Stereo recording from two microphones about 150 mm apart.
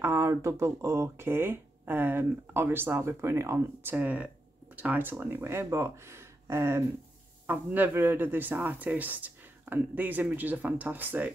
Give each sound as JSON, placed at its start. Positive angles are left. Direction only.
{"t": 0.0, "sound": "speech", "side_deg": -15}